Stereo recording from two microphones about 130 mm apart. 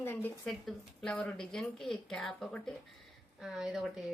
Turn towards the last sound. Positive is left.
turn(degrees=-5)  # may be behind; listen again after turning